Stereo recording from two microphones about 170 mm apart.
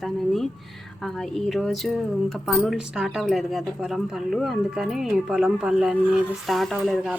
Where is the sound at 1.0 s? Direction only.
Centre (ahead or behind).